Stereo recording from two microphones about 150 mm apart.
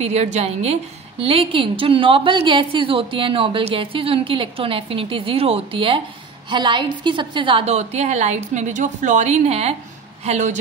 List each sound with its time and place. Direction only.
0.0 s a woman's voice: 45° right (ahead or behind)